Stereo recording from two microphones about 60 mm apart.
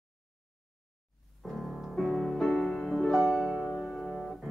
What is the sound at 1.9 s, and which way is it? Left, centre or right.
Music, centre.